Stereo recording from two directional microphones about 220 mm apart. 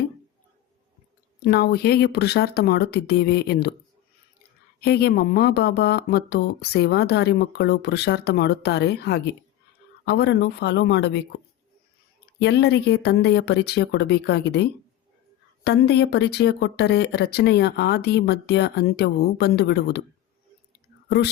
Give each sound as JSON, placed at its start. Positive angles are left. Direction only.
{"t": 1.5, "sound": "speech", "side_deg": 45}
{"t": 4.8, "sound": "speech", "side_deg": 45}
{"t": 12.4, "sound": "speech", "side_deg": 50}
{"t": 21.2, "sound": "speech", "side_deg": 50}